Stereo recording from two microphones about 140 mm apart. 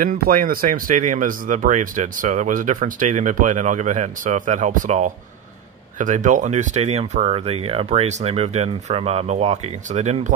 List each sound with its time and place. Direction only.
0.0 s speech: 85° right; by 10.3 s 55° right (ahead or behind)